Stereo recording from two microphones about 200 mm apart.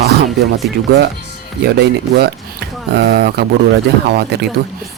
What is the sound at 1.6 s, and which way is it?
Speech, 55° right (ahead or behind).